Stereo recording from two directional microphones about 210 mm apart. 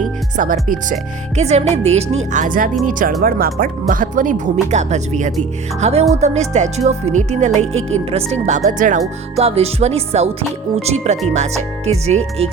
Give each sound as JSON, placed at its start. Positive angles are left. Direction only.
{"t": 0.3, "sound": "speech", "side_deg": -40}